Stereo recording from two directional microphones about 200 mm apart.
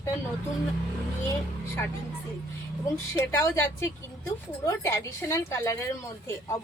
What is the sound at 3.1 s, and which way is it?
Speech, 15° left (ahead or behind).